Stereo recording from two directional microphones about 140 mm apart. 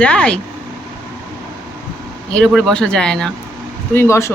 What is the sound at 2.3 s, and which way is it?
Speech, 5° left (ahead or behind).